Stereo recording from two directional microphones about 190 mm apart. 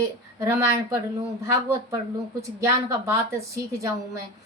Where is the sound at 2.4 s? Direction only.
15° right (ahead or behind).